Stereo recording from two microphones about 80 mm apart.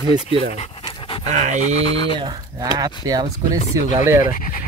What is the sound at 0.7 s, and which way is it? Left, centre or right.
Dog, left.